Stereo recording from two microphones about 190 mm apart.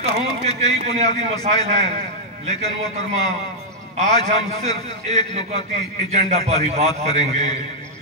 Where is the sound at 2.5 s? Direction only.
35° right (ahead or behind).